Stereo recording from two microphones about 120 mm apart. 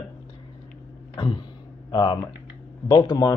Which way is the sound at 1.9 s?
35° left (ahead or behind).